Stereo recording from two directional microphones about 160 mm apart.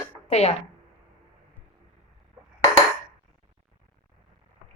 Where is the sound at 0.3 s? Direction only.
40° left (ahead or behind).